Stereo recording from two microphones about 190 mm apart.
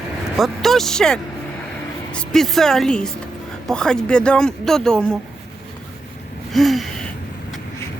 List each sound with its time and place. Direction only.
0.3 s speech: centre (ahead or behind)
6.5 s gasp: centre (ahead or behind)